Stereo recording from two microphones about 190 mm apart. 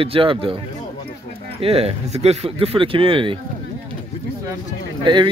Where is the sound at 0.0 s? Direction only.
30° right (ahead or behind).